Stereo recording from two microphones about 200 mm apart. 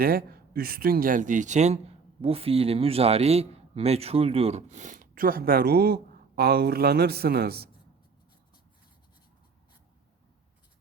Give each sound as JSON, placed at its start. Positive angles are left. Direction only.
{"t": 0.0, "sound": "a man's voice", "side_deg": -45}